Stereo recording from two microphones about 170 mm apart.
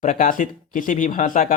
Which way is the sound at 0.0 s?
50° left (ahead or behind).